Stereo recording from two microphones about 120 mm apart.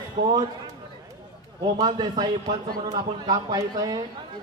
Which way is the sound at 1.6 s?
35° right (ahead or behind).